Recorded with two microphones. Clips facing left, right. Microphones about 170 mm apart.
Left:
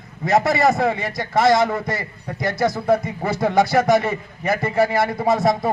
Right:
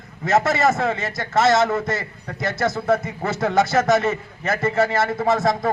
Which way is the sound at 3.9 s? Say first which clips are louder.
Left 1 dB; 15° left (ahead or behind).